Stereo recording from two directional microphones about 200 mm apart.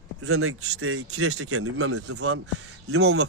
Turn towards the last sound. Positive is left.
turn(degrees=-75)  # may be behind; listen again after turning